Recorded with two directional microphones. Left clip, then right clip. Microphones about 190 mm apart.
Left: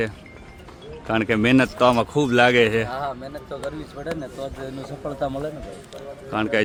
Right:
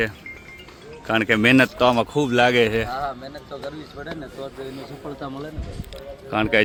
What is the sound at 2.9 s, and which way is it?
Speech, 25° left (ahead or behind).